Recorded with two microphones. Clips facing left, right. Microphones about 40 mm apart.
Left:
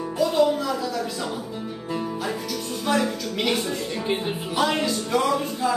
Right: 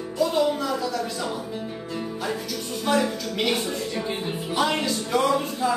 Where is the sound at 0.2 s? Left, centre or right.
Centre.